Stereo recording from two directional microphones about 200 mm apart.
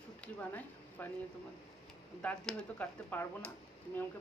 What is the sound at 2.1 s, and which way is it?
Speech, 5° left (ahead or behind).